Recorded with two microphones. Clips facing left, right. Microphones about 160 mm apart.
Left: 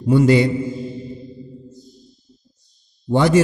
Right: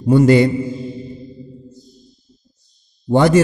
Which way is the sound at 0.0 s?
45° right (ahead or behind).